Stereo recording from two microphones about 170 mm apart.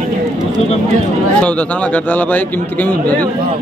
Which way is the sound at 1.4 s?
5° left (ahead or behind).